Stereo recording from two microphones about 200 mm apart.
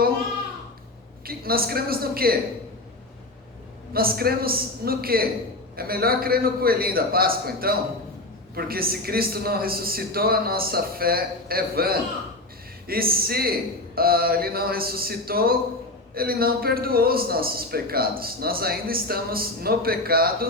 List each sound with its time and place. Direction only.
1.2 s a woman's voice: 50° right (ahead or behind)
3.9 s a man's voice: 50° right (ahead or behind)